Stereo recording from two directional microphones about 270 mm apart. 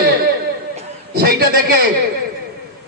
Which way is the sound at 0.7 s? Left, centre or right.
Right.